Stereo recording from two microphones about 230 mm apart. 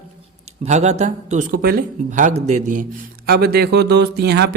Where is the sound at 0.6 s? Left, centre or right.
Right.